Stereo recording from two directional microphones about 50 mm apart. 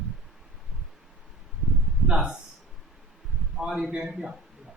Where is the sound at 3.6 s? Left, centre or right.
Centre.